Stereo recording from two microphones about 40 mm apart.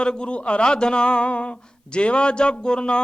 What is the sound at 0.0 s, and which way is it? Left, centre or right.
Speech, left.